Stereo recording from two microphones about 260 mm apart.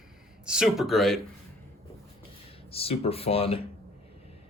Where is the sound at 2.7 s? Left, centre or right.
Left.